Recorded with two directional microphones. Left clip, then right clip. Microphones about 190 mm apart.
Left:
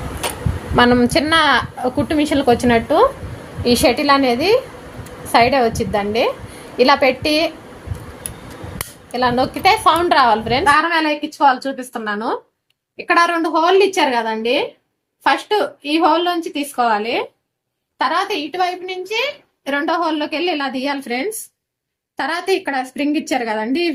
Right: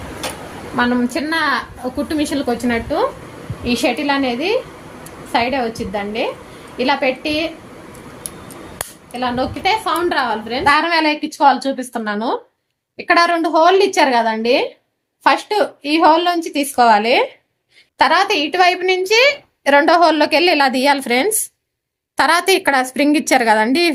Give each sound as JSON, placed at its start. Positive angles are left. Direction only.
{"t": 0.8, "sound": "a woman's voice", "side_deg": 45}
{"t": 9.1, "sound": "a woman's voice", "side_deg": 55}
{"t": 10.7, "sound": "a woman's voice", "side_deg": -35}
{"t": 17.9, "sound": "a woman's voice", "side_deg": -55}